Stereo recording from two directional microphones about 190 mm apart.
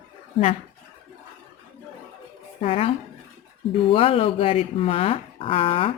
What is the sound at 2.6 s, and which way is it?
Speech, 30° left (ahead or behind).